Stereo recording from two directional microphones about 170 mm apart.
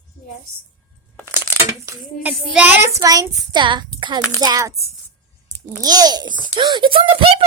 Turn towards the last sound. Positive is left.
turn(degrees=-30)  # may be behind; listen again after turning